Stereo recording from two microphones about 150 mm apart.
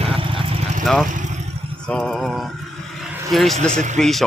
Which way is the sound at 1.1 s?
55° right (ahead or behind).